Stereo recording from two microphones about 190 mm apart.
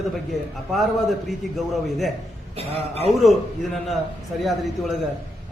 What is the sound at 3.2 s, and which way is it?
Speech, centre (ahead or behind).